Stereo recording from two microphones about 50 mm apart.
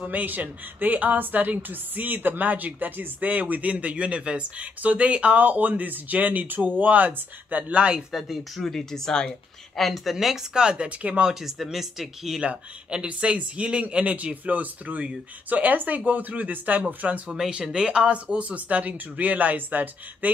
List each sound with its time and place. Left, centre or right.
0.0 s a woman's voice: right
8.1 s speech: centre
9.8 s speech: centre
10.1 s speech: centre; by 11.2 s right
11.2 s speech: centre
12.4 s a woman's voice: centre; by 20.2 s right